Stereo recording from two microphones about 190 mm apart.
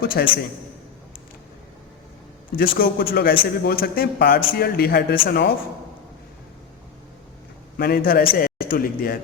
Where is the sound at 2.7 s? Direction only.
50° left (ahead or behind).